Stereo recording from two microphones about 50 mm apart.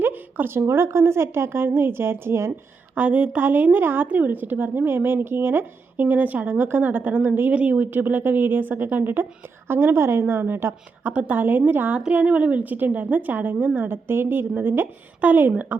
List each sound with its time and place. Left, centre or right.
0.0 s a woman's voice: right
2.9 s a woman's voice: right
7.5 s a woman's voice: right
9.6 s a woman's voice: right
11.0 s a woman's voice: right